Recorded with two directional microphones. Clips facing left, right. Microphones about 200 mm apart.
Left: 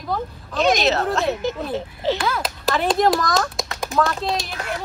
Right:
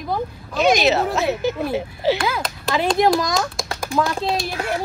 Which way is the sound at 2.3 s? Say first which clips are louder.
Even; centre (ahead or behind).